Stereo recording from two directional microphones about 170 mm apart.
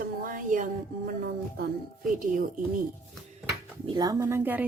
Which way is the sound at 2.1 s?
50° right (ahead or behind).